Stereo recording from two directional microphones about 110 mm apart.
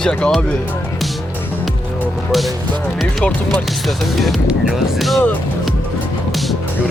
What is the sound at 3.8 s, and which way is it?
Speech, centre (ahead or behind).